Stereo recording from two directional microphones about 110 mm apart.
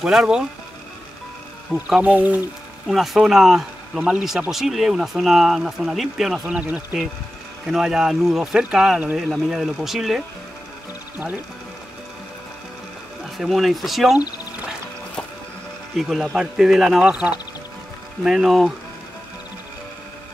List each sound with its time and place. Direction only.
0.0 s speech: 5° right (ahead or behind)
1.9 s speech: 15° right (ahead or behind)
2.9 s speech: centre (ahead or behind)
11.1 s speech: 15° right (ahead or behind)
13.4 s speech: centre (ahead or behind)
16.0 s speech: centre (ahead or behind)